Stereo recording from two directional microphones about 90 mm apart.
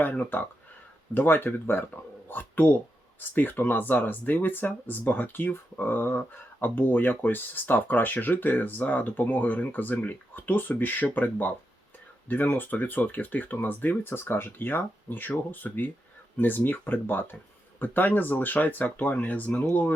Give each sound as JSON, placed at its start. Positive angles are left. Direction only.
{"t": 0.0, "sound": "speech", "side_deg": 20}